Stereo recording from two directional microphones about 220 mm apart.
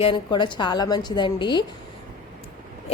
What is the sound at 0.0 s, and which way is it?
A woman's voice, 20° left (ahead or behind).